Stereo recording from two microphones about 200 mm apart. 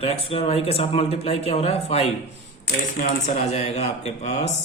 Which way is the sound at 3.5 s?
30° left (ahead or behind).